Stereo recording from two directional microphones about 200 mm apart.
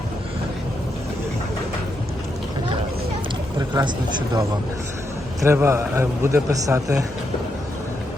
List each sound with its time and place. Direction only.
3.8 s speech: 20° right (ahead or behind)
5.4 s a man's voice: 15° right (ahead or behind)